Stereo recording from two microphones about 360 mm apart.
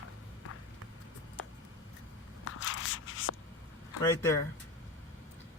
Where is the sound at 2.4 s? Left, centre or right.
Left.